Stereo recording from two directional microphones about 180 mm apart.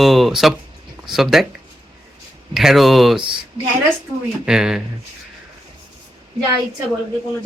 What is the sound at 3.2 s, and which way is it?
Speech, 25° right (ahead or behind).